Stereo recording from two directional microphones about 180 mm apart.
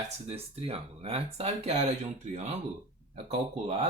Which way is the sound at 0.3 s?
35° right (ahead or behind).